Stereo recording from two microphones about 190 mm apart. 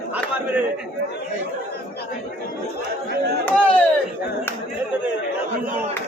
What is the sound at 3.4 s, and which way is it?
Chop, 5° left (ahead or behind).